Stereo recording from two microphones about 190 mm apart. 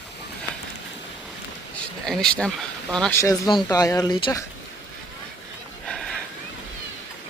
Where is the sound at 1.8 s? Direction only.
5° left (ahead or behind).